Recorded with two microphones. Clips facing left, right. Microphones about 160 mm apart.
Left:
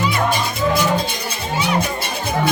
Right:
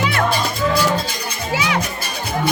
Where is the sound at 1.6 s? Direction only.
90° right.